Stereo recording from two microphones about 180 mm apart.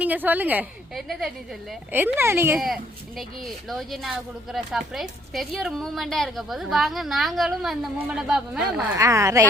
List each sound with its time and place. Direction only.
0.0 s a woman's voice: 10° right (ahead or behind)
1.9 s a woman's voice: 10° right (ahead or behind)
2.6 s speech: centre (ahead or behind)
9.0 s a woman's voice: 15° right (ahead or behind)